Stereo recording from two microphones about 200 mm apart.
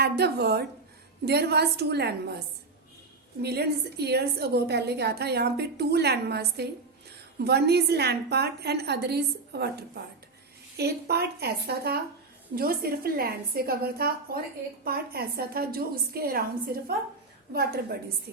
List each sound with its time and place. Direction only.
0.0 s a woman's voice: 55° right (ahead or behind)
3.4 s a woman's voice: 55° right (ahead or behind)
17.5 s a woman's voice: 50° right (ahead or behind)